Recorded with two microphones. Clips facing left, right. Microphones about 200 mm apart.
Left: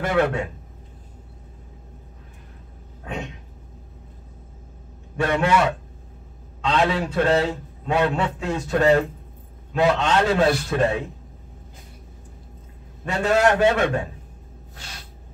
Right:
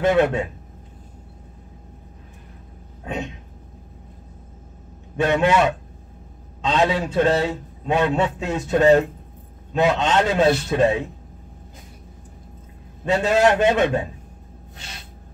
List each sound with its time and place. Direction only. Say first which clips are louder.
0.0 s a man's voice: right 3 dB; 20° right (ahead or behind)
5.1 s a man's voice: right 2 dB; 20° right (ahead or behind)
13.0 s a man's voice: right 2 dB; 20° right (ahead or behind)